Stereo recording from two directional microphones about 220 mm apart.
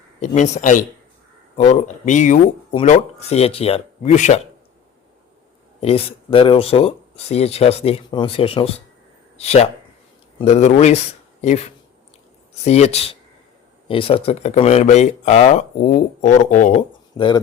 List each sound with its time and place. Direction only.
0.2 s speech: 30° left (ahead or behind)
5.8 s speech: 25° left (ahead or behind)
17.2 s speech: 20° left (ahead or behind)